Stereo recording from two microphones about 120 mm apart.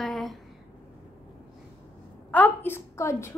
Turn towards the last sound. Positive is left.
turn(degrees=20)  # may be behind; listen again after turning